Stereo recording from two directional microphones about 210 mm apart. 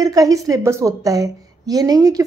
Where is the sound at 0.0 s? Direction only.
15° right (ahead or behind).